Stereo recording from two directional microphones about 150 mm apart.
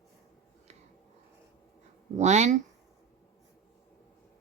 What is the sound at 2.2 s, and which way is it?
Speech, 50° right (ahead or behind).